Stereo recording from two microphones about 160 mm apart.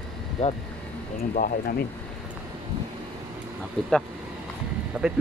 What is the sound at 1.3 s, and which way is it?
Speech, 60° left (ahead or behind).